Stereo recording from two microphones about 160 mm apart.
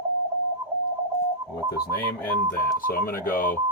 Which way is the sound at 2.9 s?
65° left (ahead or behind).